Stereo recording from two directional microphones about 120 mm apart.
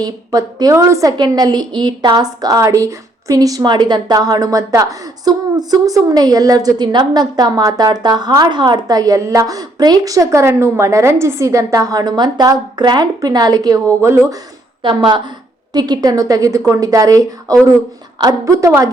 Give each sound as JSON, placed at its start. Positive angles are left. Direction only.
{"t": 0.0, "sound": "a woman's voice", "side_deg": -30}
{"t": 14.8, "sound": "a woman's voice", "side_deg": -40}